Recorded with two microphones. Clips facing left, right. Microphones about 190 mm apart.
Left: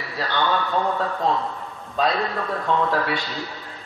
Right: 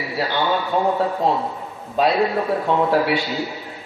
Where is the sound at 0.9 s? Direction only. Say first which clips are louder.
Right 3 dB; 25° right (ahead or behind).